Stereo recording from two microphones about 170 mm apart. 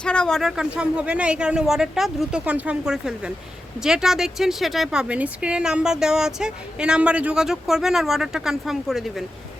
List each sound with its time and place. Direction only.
0.0 s speech: 5° left (ahead or behind)